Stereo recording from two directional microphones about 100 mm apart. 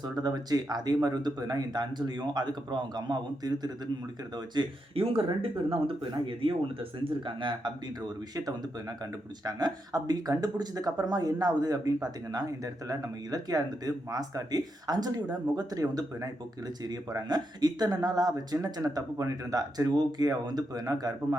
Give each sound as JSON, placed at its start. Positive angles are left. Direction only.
{"t": 0.0, "sound": "speech", "side_deg": -40}
{"t": 4.9, "sound": "speech", "side_deg": -65}
{"t": 9.4, "sound": "speech", "side_deg": -40}